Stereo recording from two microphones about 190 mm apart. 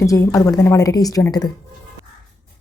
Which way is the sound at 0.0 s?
15° left (ahead or behind).